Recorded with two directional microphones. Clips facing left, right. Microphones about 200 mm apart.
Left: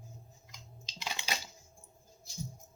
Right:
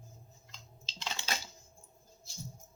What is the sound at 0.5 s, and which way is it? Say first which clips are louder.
Typing: left 1 dB; 15° left (ahead or behind).